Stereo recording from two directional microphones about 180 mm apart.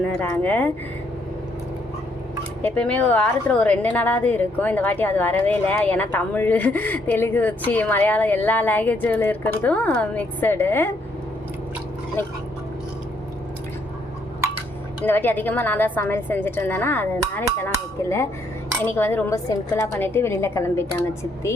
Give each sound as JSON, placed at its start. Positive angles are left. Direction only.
{"t": 0.2, "sound": "a woman's voice", "side_deg": 10}
{"t": 2.6, "sound": "a woman's voice", "side_deg": 5}
{"t": 15.0, "sound": "a woman's voice", "side_deg": 10}
{"t": 18.9, "sound": "a woman's voice", "side_deg": 10}